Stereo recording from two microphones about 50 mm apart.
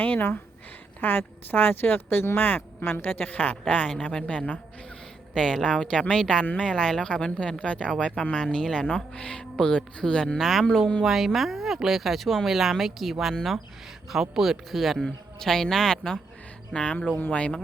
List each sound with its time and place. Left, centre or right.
0.0 s speech: left
5.3 s speech: centre
10.3 s speech: centre; by 17.6 s left